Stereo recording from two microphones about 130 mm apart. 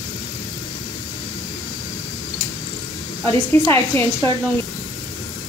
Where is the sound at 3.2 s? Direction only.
15° left (ahead or behind).